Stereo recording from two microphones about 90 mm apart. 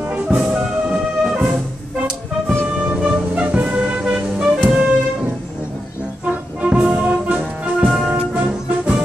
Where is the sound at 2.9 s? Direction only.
15° right (ahead or behind).